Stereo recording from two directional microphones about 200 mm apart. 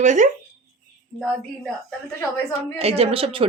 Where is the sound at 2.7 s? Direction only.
30° right (ahead or behind).